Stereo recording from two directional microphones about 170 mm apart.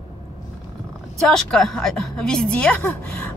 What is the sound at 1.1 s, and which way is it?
Speech, centre (ahead or behind).